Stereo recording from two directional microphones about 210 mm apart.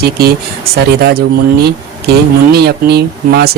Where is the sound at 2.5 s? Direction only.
50° right (ahead or behind).